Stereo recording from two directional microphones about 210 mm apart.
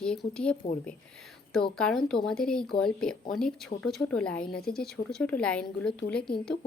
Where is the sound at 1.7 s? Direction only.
5° left (ahead or behind).